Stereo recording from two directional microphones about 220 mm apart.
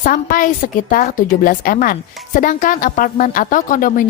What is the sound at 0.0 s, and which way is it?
A woman's voice, 40° left (ahead or behind).